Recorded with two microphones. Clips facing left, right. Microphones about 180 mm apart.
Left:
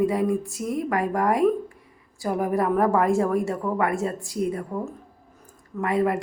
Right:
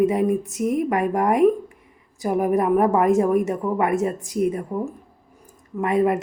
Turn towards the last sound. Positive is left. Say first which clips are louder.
# right 3 dB
turn(degrees=-20)  # may be behind; listen again after turning